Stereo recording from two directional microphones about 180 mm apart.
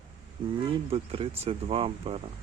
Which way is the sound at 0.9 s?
30° right (ahead or behind).